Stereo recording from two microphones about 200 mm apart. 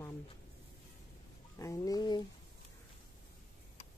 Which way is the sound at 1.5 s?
15° left (ahead or behind).